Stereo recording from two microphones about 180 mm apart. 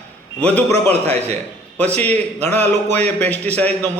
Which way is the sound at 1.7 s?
10° left (ahead or behind).